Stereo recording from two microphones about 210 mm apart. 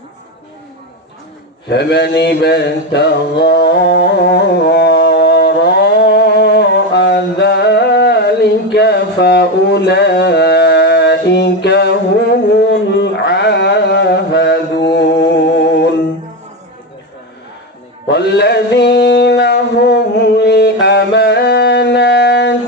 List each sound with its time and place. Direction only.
1.7 s mantra: 50° left (ahead or behind)
12.7 s a sound: 55° left (ahead or behind)
18.1 s mantra: 50° left (ahead or behind)